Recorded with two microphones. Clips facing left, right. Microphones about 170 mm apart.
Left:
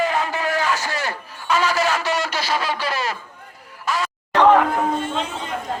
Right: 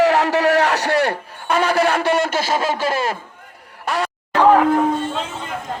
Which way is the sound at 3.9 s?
65° right (ahead or behind).